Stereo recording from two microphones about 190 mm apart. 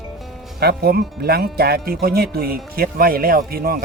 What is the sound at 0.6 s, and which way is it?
Speech, 55° right (ahead or behind).